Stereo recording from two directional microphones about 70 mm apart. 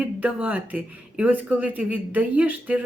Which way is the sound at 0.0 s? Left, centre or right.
Centre.